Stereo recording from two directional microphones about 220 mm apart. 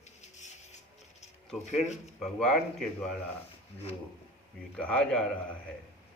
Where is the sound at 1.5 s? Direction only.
Centre (ahead or behind).